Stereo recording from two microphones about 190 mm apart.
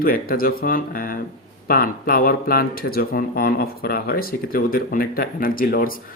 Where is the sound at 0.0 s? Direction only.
50° left (ahead or behind).